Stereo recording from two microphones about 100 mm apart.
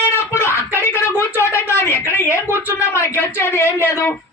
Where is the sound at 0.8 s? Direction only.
25° left (ahead or behind).